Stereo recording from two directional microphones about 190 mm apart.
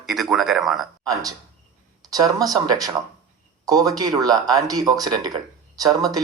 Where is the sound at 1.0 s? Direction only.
20° right (ahead or behind).